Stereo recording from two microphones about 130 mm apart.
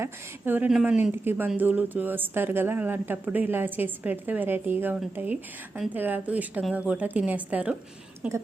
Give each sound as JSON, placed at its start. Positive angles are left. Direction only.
{"t": 0.0, "sound": "speech", "side_deg": -15}
{"t": 0.7, "sound": "a woman's voice", "side_deg": -5}
{"t": 1.1, "sound": "speech", "side_deg": -15}